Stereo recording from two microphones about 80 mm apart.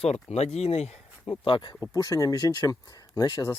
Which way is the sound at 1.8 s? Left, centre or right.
Left.